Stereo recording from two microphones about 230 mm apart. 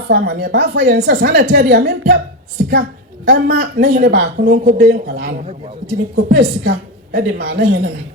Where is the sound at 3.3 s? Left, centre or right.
Right.